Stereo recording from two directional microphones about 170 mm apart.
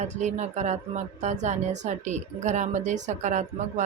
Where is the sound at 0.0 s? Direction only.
45° right (ahead or behind).